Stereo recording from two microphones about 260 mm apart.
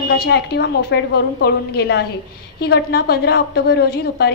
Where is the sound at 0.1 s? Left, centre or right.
Left.